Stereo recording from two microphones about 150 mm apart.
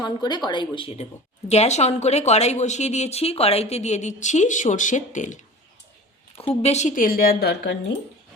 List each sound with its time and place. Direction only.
0.0 s speech: 30° left (ahead or behind)
1.5 s speech: 45° left (ahead or behind)
6.3 s speech: 40° left (ahead or behind); by 7.7 s 90° left